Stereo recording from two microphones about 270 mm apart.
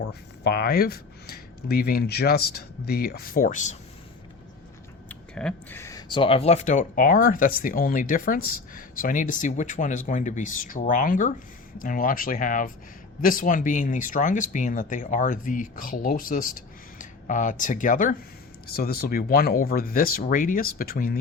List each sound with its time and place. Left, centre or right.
0.0 s speech: left
5.0 s speech: centre; by 21.2 s left